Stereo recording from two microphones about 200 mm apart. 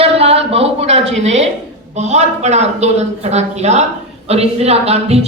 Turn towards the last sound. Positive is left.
turn(degrees=-30)  # may be behind; listen again after turning